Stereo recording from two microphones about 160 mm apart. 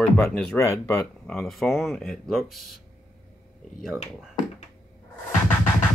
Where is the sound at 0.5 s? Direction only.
15° left (ahead or behind).